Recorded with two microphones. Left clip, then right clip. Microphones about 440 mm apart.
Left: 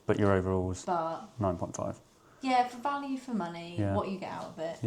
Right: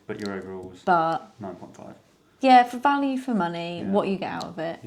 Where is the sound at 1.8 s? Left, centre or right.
Left.